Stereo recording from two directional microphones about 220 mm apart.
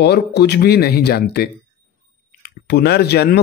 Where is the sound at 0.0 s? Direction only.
50° left (ahead or behind).